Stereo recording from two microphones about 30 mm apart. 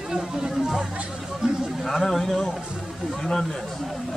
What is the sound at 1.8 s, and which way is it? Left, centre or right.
Speech, centre.